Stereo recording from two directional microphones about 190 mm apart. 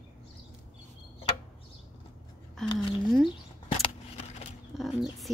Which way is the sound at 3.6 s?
30° left (ahead or behind).